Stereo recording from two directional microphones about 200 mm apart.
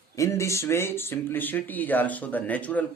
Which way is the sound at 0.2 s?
15° left (ahead or behind).